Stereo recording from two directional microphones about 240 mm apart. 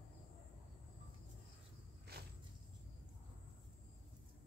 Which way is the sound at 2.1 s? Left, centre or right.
Right.